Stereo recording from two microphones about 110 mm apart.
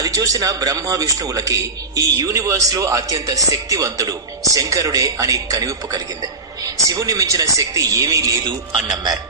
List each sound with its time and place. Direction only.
0.0 s speech: 35° right (ahead or behind)
8.4 s a man's voice: 45° right (ahead or behind)